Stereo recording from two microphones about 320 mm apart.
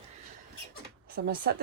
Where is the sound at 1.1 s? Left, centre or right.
Right.